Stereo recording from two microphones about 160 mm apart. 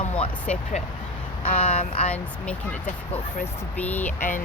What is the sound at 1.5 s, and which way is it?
Speech, 35° left (ahead or behind).